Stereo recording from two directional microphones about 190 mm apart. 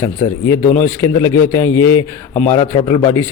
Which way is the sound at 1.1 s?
10° left (ahead or behind).